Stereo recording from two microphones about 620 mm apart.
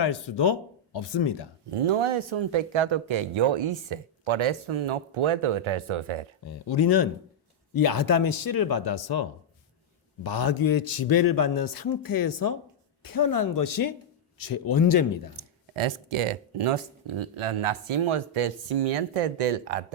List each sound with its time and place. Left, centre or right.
0.0 s speech: left
1.7 s speech: right
6.7 s speech: left
10.2 s speech: left
15.4 s speech: right